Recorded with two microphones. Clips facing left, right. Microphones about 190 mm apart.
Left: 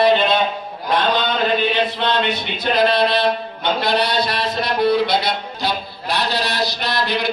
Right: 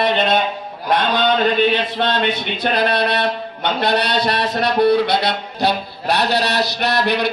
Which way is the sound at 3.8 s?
65° right (ahead or behind).